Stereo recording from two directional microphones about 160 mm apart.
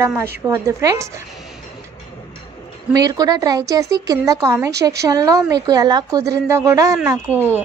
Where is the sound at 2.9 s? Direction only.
25° right (ahead or behind).